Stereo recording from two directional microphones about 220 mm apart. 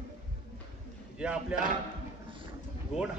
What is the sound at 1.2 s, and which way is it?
Speech, 5° right (ahead or behind).